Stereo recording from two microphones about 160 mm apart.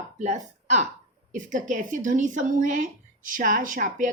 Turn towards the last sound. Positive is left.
turn(degrees=-55)  # may be behind; listen again after turning